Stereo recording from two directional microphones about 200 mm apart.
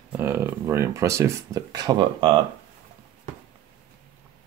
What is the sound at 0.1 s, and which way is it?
Speech, 10° right (ahead or behind).